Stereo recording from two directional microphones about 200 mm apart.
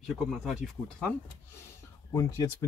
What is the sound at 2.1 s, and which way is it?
Speech, 15° left (ahead or behind).